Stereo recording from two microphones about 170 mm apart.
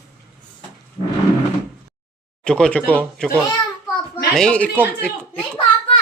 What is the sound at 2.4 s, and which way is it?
Speech, 5° left (ahead or behind).